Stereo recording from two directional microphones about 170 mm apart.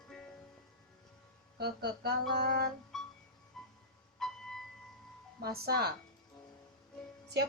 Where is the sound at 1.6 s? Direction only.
75° right (ahead or behind).